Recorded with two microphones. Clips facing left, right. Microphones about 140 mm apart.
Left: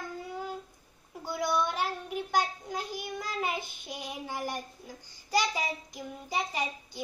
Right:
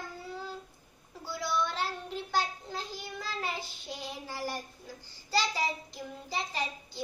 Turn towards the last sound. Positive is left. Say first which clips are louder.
# left 2 dB
turn(degrees=15)  # may be behind; listen again after turning